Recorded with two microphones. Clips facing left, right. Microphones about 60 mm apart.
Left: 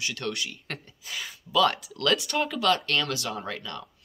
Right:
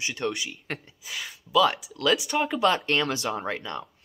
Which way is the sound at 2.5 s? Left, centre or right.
Right.